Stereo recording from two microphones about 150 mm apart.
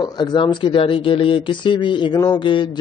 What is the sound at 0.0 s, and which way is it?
A man's voice, 30° left (ahead or behind).